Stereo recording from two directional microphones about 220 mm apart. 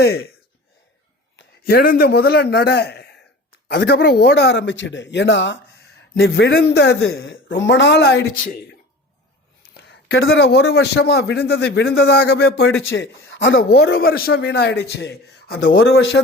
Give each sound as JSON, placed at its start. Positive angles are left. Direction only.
{"t": 0.0, "sound": "a man's voice", "side_deg": 45}
{"t": 1.4, "sound": "a man's voice", "side_deg": 45}
{"t": 9.6, "sound": "a man's voice", "side_deg": 50}